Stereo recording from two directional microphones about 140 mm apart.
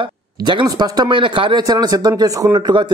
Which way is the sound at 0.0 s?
35° right (ahead or behind).